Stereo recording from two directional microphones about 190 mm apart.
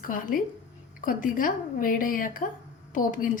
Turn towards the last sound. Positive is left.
turn(degrees=45)  # may be behind; listen again after turning